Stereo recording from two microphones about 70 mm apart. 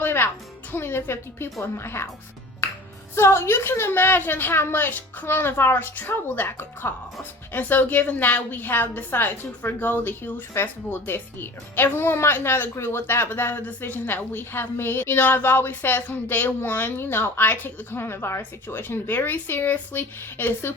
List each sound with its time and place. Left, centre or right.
0.0 s music: left
0.7 s a woman's voice: left
3.2 s a woman's voice: left